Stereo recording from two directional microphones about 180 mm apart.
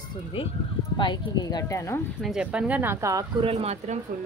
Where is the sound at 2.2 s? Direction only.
5° right (ahead or behind); by 3.5 s 20° right (ahead or behind).